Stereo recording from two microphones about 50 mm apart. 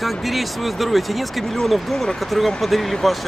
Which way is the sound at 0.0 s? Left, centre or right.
Centre.